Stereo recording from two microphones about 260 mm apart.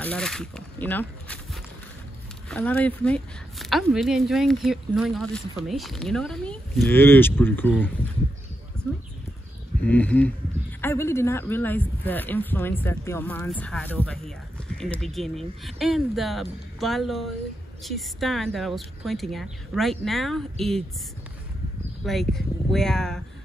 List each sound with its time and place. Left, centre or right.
0.0 s speech: centre
9.8 s speech: centre
22.0 s speech: centre